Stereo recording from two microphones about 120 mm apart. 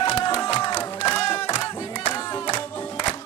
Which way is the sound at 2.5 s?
40° left (ahead or behind).